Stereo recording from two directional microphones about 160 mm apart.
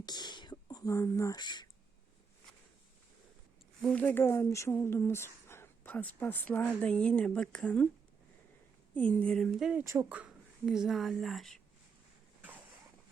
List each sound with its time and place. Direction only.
0.0 s whispering: 25° left (ahead or behind)
3.8 s speech: 5° left (ahead or behind)
9.0 s speech: 10° left (ahead or behind)
9.8 s speech: 15° right (ahead or behind); by 11.6 s centre (ahead or behind)
12.4 s a sound: 10° right (ahead or behind)